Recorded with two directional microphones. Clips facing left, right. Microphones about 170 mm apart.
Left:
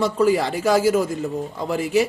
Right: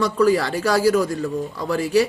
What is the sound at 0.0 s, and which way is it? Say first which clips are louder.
A man's voice: right 1 dB; 25° left (ahead or behind).